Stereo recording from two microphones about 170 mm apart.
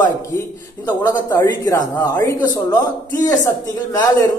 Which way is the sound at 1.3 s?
15° left (ahead or behind).